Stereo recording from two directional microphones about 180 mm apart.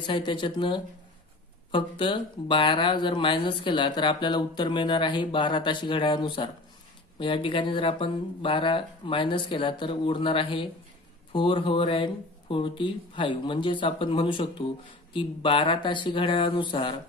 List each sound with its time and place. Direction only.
0.0 s speech: 25° left (ahead or behind)